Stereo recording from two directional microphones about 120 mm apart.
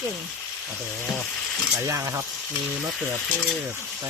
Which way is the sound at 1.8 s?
25° right (ahead or behind).